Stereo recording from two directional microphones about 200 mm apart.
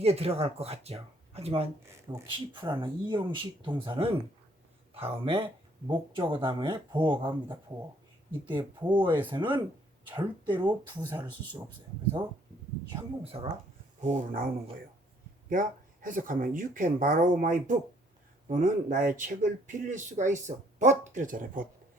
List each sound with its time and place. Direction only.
0.0 s speech: 30° right (ahead or behind)
8.4 s speech: 25° right (ahead or behind)
10.6 s speech: 20° right (ahead or behind)
12.9 s speech: 25° right (ahead or behind)
14.0 s speech: 35° right (ahead or behind)